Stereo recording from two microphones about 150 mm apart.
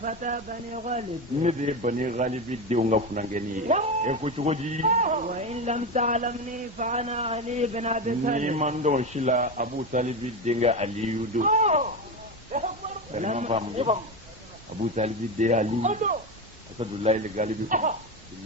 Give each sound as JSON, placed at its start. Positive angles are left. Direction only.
{"t": 0.0, "sound": "speech", "side_deg": -60}
{"t": 0.9, "sound": "a man's voice", "side_deg": -50}
{"t": 12.5, "sound": "a sound", "side_deg": -55}
{"t": 13.1, "sound": "a man's voice", "side_deg": -50}